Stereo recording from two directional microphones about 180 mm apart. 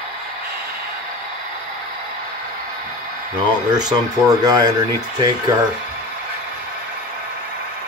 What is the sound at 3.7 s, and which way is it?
Speech, 20° right (ahead or behind).